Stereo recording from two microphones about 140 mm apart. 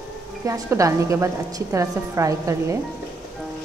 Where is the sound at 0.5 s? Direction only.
25° right (ahead or behind).